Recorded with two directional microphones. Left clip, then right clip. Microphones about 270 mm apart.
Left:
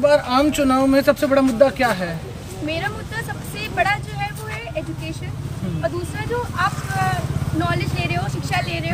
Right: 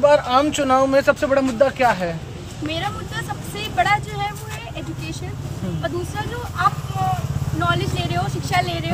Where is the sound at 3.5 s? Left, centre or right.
Centre.